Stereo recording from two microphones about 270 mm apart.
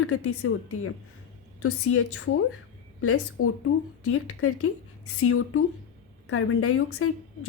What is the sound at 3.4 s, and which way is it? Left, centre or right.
A woman's voice, left.